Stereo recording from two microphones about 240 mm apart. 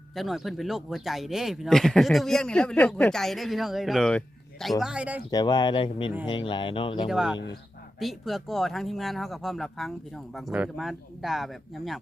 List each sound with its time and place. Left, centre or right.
0.2 s speech: centre
5.3 s speech: centre
7.1 s speech: centre